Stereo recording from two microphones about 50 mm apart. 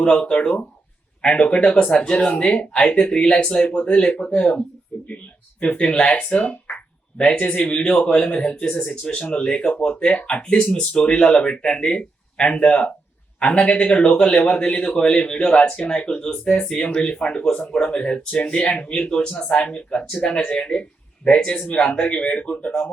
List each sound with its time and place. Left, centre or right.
0.0 s speech: left
6.7 s speech: left
21.8 s speech: left